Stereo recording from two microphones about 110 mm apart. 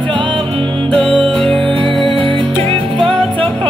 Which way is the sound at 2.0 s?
50° right (ahead or behind).